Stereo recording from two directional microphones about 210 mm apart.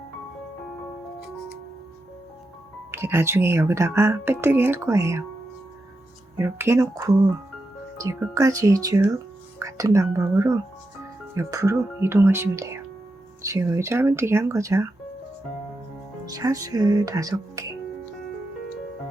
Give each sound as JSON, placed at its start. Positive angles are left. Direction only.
{"t": 2.9, "sound": "speech", "side_deg": -10}
{"t": 6.3, "sound": "speech", "side_deg": -10}
{"t": 16.2, "sound": "speech", "side_deg": -15}